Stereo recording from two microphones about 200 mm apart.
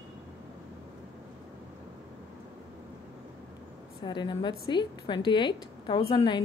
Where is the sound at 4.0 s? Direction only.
20° left (ahead or behind).